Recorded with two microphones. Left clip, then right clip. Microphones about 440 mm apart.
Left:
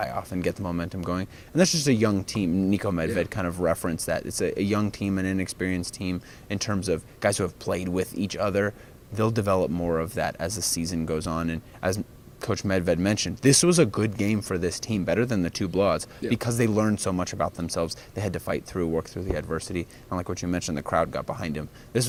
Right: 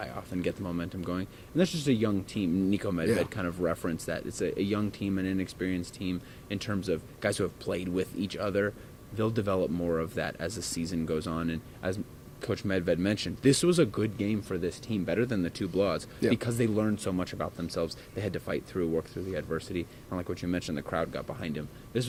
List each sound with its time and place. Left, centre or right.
0.0 s speech: left